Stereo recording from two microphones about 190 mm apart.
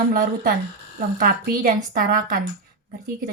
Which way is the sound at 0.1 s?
50° right (ahead or behind).